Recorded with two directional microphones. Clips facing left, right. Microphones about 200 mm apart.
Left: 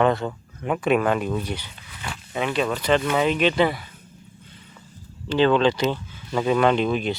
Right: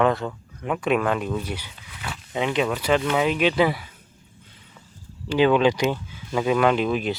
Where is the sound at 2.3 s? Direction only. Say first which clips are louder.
Right 1 dB; 15° right (ahead or behind).